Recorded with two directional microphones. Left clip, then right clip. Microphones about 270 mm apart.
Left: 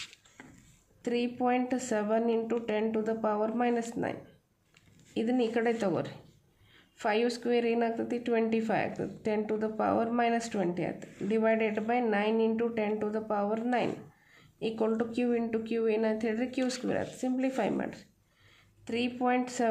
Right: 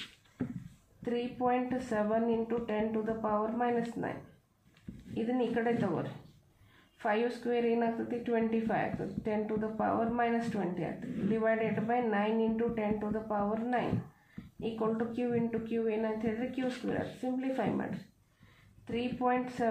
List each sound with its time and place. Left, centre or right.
1.0 s a woman's voice: left
5.1 s a woman's voice: left
18.9 s a woman's voice: left